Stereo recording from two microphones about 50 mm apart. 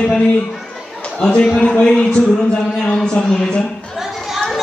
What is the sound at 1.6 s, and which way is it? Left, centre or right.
A man's voice, centre.